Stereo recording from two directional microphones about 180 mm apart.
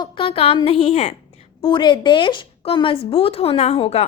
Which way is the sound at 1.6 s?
25° left (ahead or behind).